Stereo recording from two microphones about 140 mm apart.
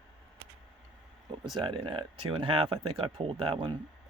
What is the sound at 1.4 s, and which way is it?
Speech, 35° right (ahead or behind).